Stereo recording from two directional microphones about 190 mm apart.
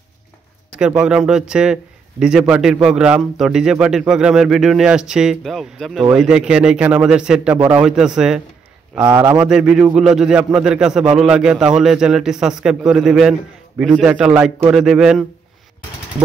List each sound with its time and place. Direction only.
0.7 s a man's voice: 5° right (ahead or behind)
9.0 s a man's voice: 15° right (ahead or behind)
9.5 s a man's voice: 5° right (ahead or behind)